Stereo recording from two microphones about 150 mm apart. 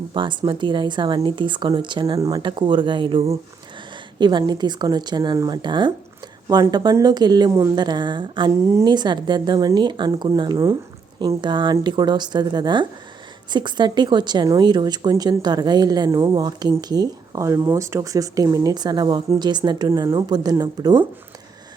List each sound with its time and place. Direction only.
0.1 s speech: 35° right (ahead or behind)